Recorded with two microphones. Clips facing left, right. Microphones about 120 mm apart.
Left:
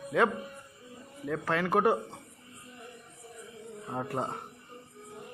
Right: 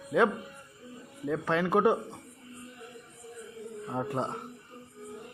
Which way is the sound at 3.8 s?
Centre (ahead or behind).